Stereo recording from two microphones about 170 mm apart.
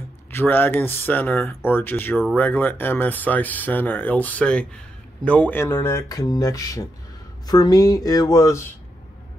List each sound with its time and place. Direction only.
0.3 s speech: 10° left (ahead or behind)